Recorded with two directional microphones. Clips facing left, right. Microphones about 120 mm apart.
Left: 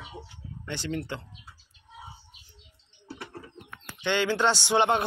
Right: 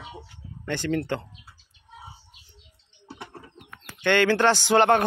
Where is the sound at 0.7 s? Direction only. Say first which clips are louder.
Right 6 dB; 55° right (ahead or behind).